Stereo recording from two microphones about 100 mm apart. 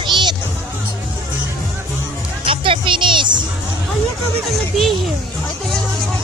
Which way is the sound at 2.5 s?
60° right (ahead or behind).